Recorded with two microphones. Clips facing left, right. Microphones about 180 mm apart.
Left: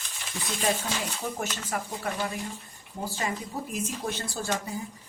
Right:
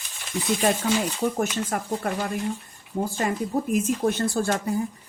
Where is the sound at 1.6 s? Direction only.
50° right (ahead or behind).